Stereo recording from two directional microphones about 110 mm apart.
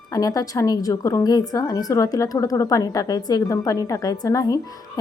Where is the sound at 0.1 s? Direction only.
35° left (ahead or behind).